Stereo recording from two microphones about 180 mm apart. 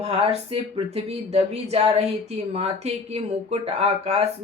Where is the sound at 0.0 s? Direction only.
35° right (ahead or behind).